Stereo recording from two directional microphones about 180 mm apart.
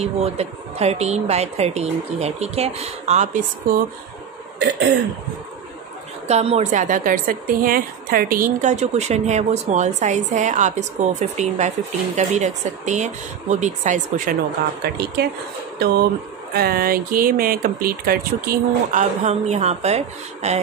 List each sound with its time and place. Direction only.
0.0 s speech: 35° right (ahead or behind)
4.6 s throat clearing: 70° right (ahead or behind)
6.2 s speech: 35° right (ahead or behind)
15.2 s speech: 65° right (ahead or behind)
16.5 s speech: 55° right (ahead or behind); by 20.6 s 35° right (ahead or behind)